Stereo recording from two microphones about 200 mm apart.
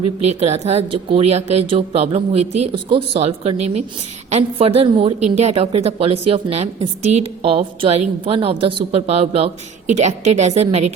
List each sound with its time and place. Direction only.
0.3 s a woman's voice: 30° right (ahead or behind)